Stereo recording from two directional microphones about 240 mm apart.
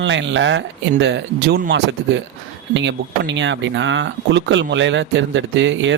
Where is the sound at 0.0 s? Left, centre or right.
Right.